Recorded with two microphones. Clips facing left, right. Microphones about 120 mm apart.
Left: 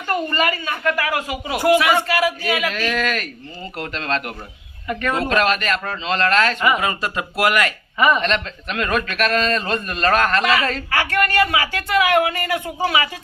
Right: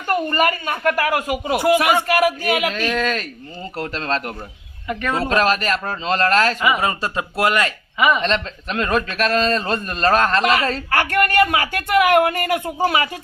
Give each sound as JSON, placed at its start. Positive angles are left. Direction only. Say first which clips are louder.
{"t": 0.3, "sound": "speech", "louder": "right 2 dB", "side_deg": -45}
{"t": 1.5, "sound": "speech", "louder": "left 1 dB", "side_deg": -15}
{"t": 2.0, "sound": "speech", "louder": "right 2 dB", "side_deg": -50}
{"t": 2.7, "sound": "speech", "louder": "right 1 dB", "side_deg": -15}
{"t": 3.0, "sound": "a man's voice", "louder": "right 1 dB", "side_deg": -30}
{"t": 6.6, "sound": "speech", "louder": "even", "side_deg": -15}
{"t": 6.8, "sound": "speech", "louder": "right 1 dB", "side_deg": -30}
{"t": 7.9, "sound": "speech", "louder": "left 1 dB", "side_deg": -10}
{"t": 8.2, "sound": "a man's voice", "louder": "right 1 dB", "side_deg": -30}
{"t": 10.9, "sound": "speech", "louder": "right 2 dB", "side_deg": -50}